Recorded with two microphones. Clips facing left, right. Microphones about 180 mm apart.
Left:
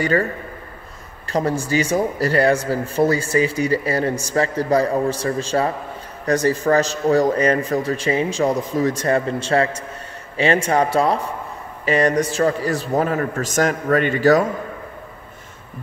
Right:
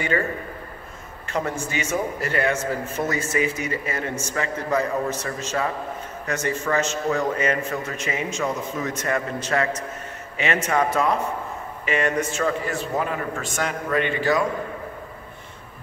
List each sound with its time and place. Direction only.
1.3 s speech: 35° left (ahead or behind)